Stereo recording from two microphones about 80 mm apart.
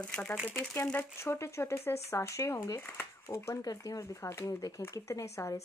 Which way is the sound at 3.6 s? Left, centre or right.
Left.